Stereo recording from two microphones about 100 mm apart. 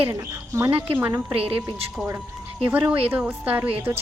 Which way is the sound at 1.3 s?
70° right (ahead or behind).